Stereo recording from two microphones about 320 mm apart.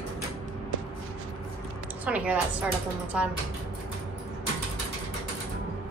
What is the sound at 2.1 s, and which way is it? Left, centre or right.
A woman's voice, centre.